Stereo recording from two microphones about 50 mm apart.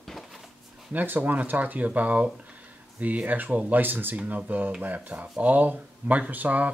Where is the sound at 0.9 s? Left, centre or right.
Right.